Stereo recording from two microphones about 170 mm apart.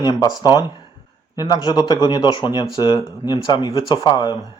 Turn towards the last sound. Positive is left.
turn(degrees=25)  # may be behind; listen again after turning